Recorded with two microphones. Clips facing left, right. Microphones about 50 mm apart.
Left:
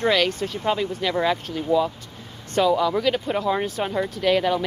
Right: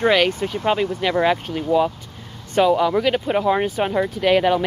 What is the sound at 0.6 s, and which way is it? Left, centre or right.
Speech, right.